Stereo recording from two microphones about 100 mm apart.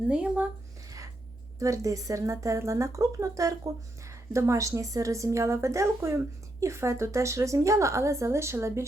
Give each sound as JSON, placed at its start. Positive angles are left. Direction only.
{"t": 0.1, "sound": "speech", "side_deg": -10}
{"t": 1.5, "sound": "a woman's voice", "side_deg": -35}